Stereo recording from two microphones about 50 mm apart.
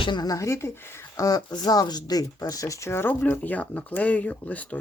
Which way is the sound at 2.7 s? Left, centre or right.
Left.